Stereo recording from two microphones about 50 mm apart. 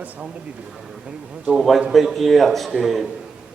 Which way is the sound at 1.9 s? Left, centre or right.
Centre.